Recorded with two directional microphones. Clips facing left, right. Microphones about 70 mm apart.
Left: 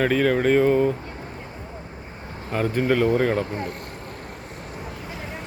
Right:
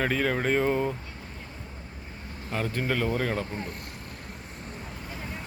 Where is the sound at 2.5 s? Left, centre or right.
Centre.